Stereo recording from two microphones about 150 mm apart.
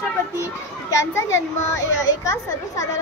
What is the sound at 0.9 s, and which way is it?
A child's voice, 20° left (ahead or behind).